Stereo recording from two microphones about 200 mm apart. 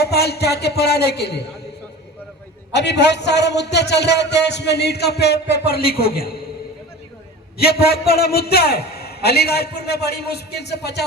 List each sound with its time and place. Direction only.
0.0 s a man's voice: 55° left (ahead or behind)
2.7 s a man's voice: 60° left (ahead or behind)
7.6 s a man's voice: 50° left (ahead or behind)